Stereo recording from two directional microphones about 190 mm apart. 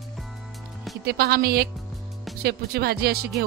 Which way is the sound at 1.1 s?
55° right (ahead or behind).